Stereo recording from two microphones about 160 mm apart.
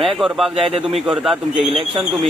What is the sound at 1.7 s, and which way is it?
Speech, 40° right (ahead or behind).